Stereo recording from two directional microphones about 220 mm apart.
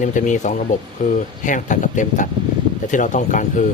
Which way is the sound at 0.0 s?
35° left (ahead or behind).